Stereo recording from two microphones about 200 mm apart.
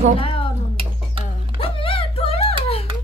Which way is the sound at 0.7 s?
25° right (ahead or behind).